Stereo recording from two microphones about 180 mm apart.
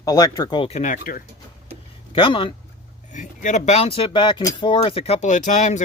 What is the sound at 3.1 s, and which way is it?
Speech, 45° left (ahead or behind).